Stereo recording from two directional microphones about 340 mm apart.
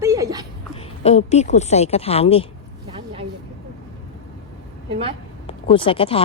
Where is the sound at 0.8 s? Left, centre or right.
Centre.